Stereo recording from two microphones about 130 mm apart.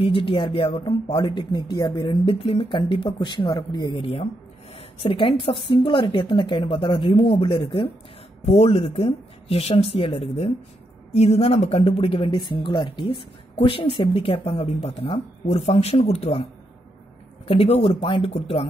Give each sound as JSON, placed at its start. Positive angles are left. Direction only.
{"t": 0.0, "sound": "a woman's voice", "side_deg": 45}
{"t": 2.0, "sound": "a woman's voice", "side_deg": 45}
{"t": 3.9, "sound": "a woman's voice", "side_deg": 45}
{"t": 8.5, "sound": "speech", "side_deg": 50}
{"t": 17.5, "sound": "speech", "side_deg": 50}